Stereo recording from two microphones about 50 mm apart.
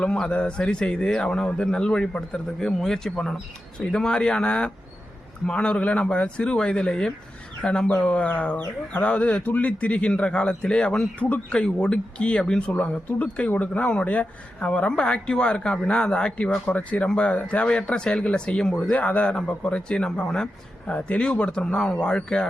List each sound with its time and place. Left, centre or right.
0.1 s speech: centre
7.9 s speech: left
16.7 s speech: left